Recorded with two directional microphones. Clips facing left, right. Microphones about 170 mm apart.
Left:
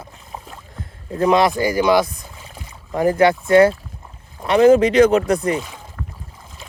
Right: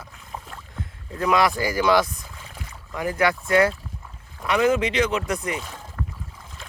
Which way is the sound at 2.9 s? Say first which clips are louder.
Left 8 dB; 35° left (ahead or behind).